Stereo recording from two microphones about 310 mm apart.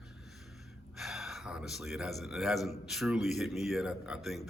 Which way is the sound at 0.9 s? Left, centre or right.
Centre.